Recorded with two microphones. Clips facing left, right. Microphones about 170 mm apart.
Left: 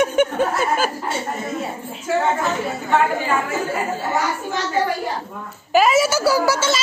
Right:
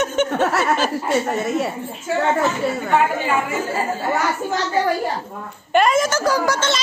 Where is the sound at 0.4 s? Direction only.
75° right (ahead or behind).